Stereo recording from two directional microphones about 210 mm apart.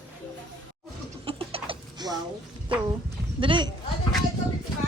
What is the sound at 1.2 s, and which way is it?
Chicken, 25° right (ahead or behind).